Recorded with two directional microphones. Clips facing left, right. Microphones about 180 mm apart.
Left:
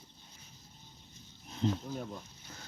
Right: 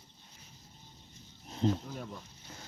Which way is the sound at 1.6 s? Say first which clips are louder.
Right 2 dB; 35° right (ahead or behind).